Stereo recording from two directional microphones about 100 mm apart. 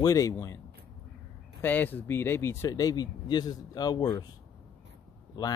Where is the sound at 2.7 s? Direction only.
40° left (ahead or behind).